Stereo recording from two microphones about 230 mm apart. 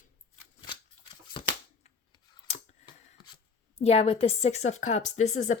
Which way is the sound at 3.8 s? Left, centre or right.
Left.